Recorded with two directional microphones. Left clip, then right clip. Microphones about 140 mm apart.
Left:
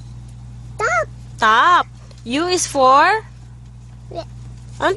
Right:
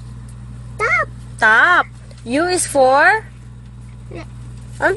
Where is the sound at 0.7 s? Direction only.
25° left (ahead or behind).